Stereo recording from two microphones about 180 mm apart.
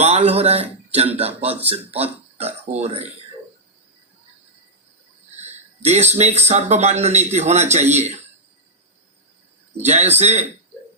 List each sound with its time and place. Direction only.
0.0 s a man's voice: 35° right (ahead or behind)
5.4 s a sound: 35° right (ahead or behind)
6.5 s a man's voice: 40° right (ahead or behind)
9.7 s a man's voice: 40° right (ahead or behind)